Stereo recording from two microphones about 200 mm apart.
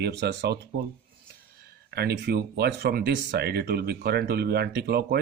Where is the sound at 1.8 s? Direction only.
55° right (ahead or behind).